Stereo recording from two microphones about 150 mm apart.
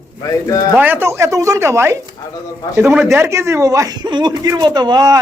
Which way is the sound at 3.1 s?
20° right (ahead or behind).